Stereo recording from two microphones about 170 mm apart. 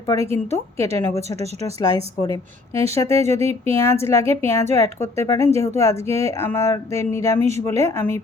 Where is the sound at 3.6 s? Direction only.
15° left (ahead or behind).